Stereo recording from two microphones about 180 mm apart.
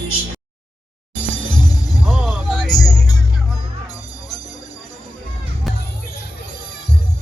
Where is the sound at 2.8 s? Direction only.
20° left (ahead or behind).